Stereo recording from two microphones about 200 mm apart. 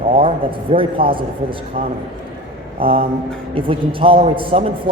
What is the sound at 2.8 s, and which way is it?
Mantra, 25° right (ahead or behind).